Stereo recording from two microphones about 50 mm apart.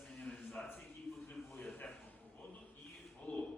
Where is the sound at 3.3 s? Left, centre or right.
Left.